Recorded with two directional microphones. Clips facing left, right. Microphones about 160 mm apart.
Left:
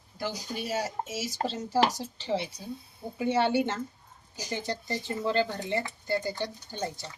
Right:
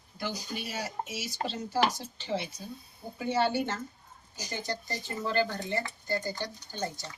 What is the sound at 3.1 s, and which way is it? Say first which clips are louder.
Speech: left 3 dB; 25° left (ahead or behind).